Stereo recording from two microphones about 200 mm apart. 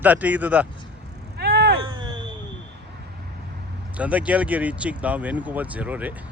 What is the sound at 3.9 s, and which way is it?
Speech, 5° right (ahead or behind).